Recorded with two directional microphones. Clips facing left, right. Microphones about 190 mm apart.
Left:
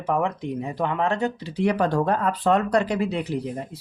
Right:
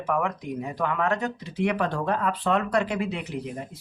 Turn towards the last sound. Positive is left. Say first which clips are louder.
# left 5 dB
turn(degrees=35)  # may be behind; listen again after turning